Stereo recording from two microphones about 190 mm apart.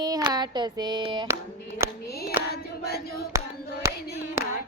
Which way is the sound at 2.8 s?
55° left (ahead or behind).